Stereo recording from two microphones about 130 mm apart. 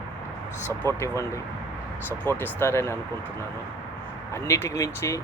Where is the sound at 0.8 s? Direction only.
20° left (ahead or behind).